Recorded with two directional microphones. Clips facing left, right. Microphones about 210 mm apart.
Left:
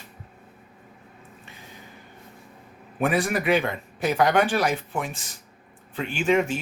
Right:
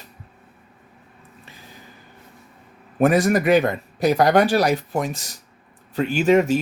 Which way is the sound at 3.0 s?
45° right (ahead or behind).